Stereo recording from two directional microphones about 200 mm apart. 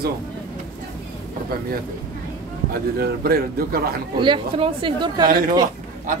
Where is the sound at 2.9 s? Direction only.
50° right (ahead or behind).